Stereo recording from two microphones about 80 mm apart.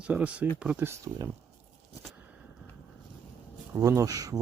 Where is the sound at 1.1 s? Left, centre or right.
Right.